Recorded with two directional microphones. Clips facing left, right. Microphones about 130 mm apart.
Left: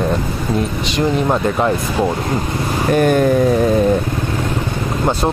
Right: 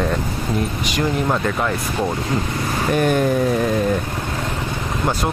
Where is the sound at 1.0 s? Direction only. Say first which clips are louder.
Left 4 dB; 25° left (ahead or behind).